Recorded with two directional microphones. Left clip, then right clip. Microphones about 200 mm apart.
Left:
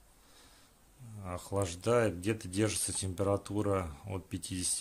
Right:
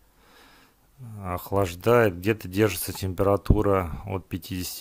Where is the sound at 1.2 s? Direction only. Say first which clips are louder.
Right 10 dB; 35° right (ahead or behind).